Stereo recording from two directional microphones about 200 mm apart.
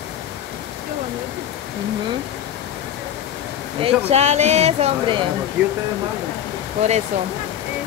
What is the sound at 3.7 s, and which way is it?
Speech, 30° right (ahead or behind).